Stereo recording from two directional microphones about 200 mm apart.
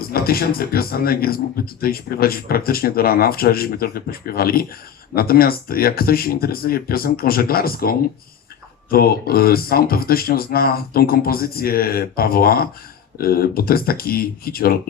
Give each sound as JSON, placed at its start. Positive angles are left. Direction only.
{"t": 0.0, "sound": "speech", "side_deg": 50}